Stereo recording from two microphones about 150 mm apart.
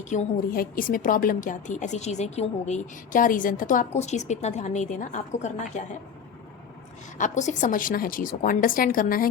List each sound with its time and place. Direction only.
0.1 s a woman's voice: 55° left (ahead or behind)
0.5 s a woman's voice: 70° left (ahead or behind); by 5.8 s 50° left (ahead or behind)
7.2 s a woman's voice: 55° left (ahead or behind)